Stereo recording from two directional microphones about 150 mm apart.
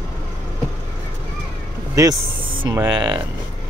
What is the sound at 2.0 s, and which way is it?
Speech, 30° right (ahead or behind).